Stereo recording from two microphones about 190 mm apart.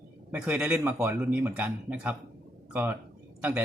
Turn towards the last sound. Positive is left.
turn(degrees=-10)  # may be behind; listen again after turning